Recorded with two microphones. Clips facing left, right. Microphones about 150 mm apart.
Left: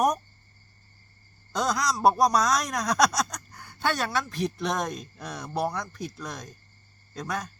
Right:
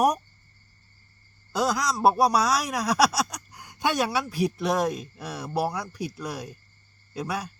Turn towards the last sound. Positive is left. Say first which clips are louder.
# right 2 dB
turn(degrees=-10)  # may be behind; listen again after turning